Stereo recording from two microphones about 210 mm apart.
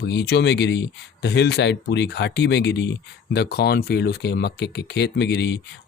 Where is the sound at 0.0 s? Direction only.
50° left (ahead or behind).